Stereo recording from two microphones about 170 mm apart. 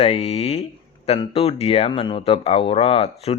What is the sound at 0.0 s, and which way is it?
Speech, 35° left (ahead or behind).